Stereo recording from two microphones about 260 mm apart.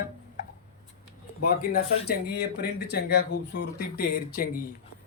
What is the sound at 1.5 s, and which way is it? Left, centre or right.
Speech, left.